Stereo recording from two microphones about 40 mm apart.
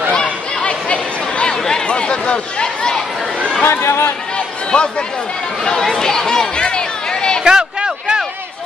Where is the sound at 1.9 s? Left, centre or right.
Left.